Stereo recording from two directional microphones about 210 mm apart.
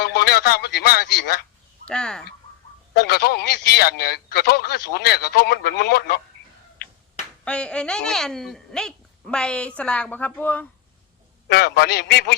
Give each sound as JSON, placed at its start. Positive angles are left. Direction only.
{"t": 0.0, "sound": "a sound", "side_deg": 50}
{"t": 1.9, "sound": "speech", "side_deg": 5}
{"t": 2.9, "sound": "speech", "side_deg": 50}
{"t": 7.4, "sound": "speech", "side_deg": 5}
{"t": 11.4, "sound": "speech", "side_deg": 50}